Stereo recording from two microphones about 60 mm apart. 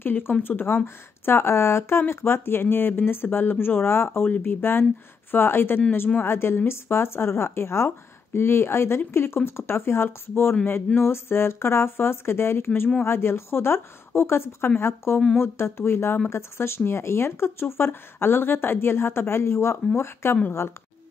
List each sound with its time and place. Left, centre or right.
0.0 s a woman's voice: left